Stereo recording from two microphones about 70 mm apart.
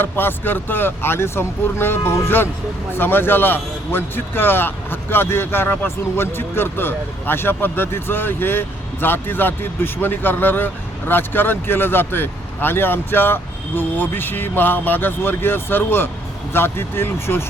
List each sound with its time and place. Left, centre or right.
0.0 s a man's voice: left